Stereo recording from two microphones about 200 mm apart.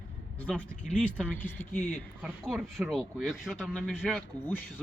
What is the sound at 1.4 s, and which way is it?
Speech, 10° left (ahead or behind).